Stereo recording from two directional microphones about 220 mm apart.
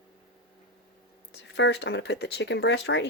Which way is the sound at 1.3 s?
55° left (ahead or behind).